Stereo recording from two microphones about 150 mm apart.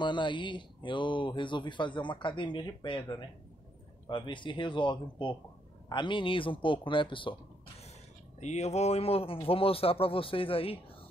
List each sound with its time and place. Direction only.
0.0 s speech: 30° left (ahead or behind)
8.4 s speech: 50° left (ahead or behind)